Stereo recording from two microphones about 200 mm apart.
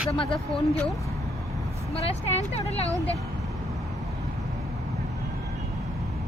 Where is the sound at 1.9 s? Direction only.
30° left (ahead or behind).